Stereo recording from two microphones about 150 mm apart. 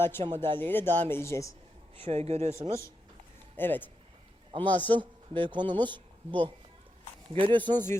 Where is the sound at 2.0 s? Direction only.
45° right (ahead or behind).